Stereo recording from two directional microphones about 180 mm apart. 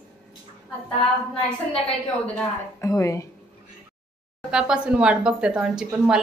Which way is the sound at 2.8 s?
15° left (ahead or behind).